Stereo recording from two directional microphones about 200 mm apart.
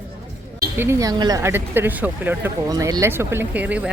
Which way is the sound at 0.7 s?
10° right (ahead or behind).